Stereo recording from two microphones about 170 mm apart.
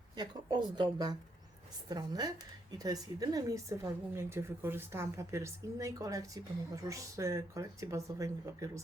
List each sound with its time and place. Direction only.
0.2 s a woman's voice: 25° right (ahead or behind)